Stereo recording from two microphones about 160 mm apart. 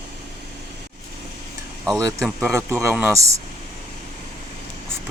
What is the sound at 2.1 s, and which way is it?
Speech, centre (ahead or behind).